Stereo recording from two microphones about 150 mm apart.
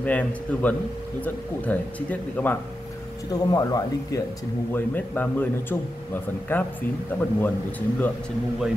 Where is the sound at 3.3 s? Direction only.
25° left (ahead or behind).